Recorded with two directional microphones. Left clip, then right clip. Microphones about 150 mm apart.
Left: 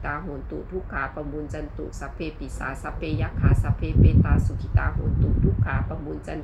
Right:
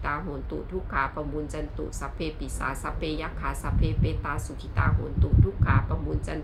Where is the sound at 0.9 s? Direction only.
20° right (ahead or behind).